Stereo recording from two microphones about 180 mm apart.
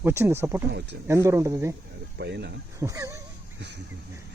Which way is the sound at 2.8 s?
15° right (ahead or behind).